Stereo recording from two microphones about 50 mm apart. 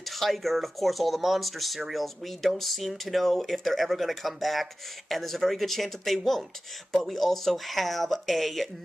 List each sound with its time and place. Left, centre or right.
0.0 s speech: centre